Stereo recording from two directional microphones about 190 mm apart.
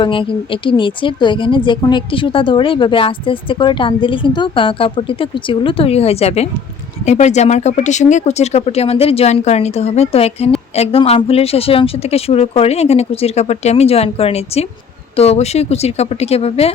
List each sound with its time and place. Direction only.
0.0 s a woman's voice: 25° left (ahead or behind)